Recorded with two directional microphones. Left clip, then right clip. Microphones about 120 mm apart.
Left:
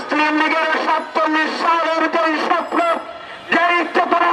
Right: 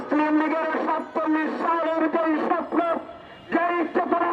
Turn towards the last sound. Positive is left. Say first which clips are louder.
# left 7 dB
turn(degrees=20)  # may be behind; listen again after turning